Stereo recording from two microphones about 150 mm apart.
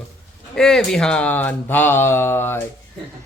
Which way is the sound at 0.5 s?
5° left (ahead or behind).